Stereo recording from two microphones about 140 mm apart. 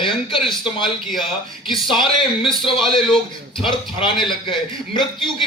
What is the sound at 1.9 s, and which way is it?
Speech, 35° left (ahead or behind).